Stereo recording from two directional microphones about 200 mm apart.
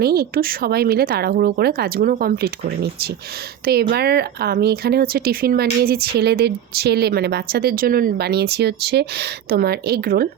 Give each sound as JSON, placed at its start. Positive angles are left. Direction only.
{"t": 0.0, "sound": "speech", "side_deg": -50}